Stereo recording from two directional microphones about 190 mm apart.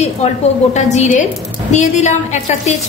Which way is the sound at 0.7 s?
35° left (ahead or behind).